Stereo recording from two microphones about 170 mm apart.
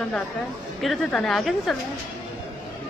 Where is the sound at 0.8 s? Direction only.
Centre (ahead or behind).